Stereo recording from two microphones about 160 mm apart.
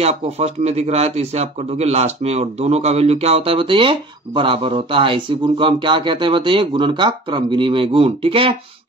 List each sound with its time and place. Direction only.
0.0 s speech: 40° right (ahead or behind)